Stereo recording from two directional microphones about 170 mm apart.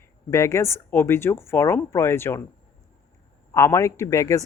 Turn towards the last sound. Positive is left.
turn(degrees=20)  # may be behind; listen again after turning